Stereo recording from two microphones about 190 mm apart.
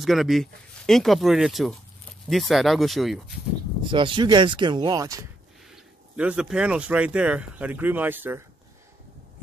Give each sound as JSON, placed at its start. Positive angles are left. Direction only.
{"t": 0.0, "sound": "speech", "side_deg": 0}
{"t": 3.9, "sound": "speech", "side_deg": -25}
{"t": 6.1, "sound": "speech", "side_deg": -5}